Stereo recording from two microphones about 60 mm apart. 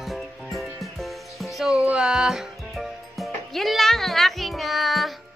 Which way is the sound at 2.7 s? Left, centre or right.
Centre.